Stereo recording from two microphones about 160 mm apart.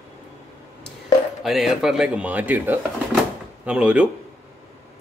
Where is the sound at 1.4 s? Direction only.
Centre (ahead or behind).